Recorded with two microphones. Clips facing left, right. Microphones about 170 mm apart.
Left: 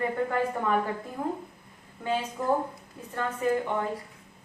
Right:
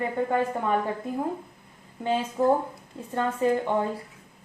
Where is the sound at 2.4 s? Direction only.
30° right (ahead or behind).